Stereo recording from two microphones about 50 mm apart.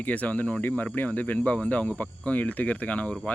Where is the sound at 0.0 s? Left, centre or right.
Left.